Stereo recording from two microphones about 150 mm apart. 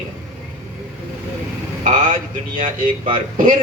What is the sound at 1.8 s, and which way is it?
A man's voice, 60° right (ahead or behind).